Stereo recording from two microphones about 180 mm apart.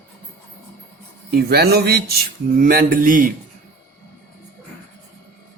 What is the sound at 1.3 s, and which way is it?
Speech, 60° right (ahead or behind).